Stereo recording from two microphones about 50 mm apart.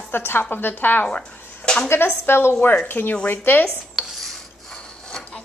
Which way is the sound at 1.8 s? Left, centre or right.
Left.